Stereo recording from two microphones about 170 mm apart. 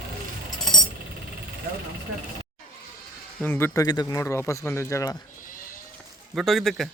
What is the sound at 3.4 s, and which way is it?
Speech, 10° left (ahead or behind).